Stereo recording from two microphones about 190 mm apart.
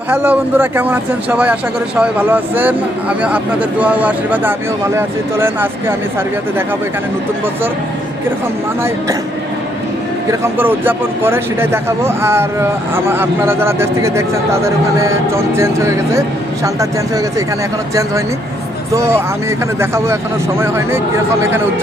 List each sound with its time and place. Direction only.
0.1 s speech: 10° right (ahead or behind)
10.4 s speech: 10° right (ahead or behind)
18.9 s speech: 15° right (ahead or behind)